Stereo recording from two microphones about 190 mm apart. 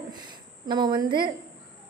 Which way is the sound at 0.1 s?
20° right (ahead or behind).